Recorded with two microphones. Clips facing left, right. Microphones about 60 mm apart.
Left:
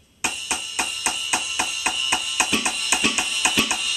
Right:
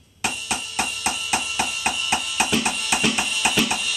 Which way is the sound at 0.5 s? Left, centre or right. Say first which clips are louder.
Right 1 dB; centre.